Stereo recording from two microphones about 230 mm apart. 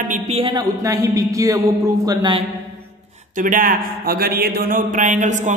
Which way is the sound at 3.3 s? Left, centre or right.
Right.